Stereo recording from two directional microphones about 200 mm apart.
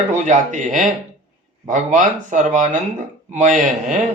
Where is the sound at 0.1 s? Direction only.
40° right (ahead or behind).